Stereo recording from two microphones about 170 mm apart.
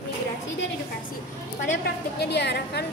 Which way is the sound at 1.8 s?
80° left.